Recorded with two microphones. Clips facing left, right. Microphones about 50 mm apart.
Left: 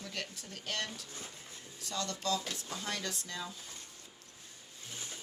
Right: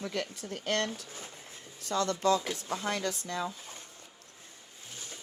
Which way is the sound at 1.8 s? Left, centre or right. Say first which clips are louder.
Right 9 dB; right.